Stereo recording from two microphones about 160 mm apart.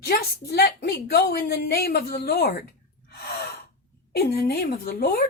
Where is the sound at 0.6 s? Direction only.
75° left (ahead or behind).